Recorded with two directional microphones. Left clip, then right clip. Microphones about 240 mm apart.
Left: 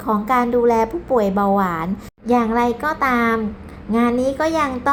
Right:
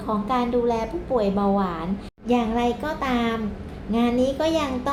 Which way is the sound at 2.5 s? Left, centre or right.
Centre.